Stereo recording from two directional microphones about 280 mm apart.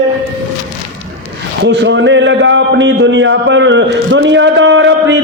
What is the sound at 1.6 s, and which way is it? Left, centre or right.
A man's voice, right.